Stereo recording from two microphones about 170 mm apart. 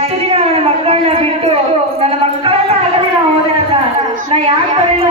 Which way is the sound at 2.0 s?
35° right (ahead or behind).